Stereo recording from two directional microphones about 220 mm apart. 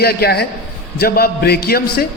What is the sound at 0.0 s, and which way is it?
A man's voice, 45° left (ahead or behind).